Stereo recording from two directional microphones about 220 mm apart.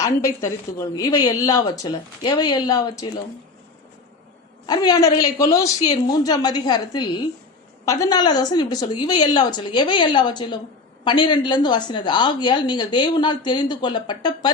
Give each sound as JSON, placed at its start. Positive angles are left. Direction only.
{"t": 0.0, "sound": "speech", "side_deg": 15}
{"t": 4.6, "sound": "speech", "side_deg": 20}